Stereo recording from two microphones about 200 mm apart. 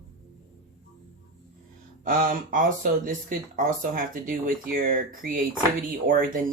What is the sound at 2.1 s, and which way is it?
Speech, 45° right (ahead or behind).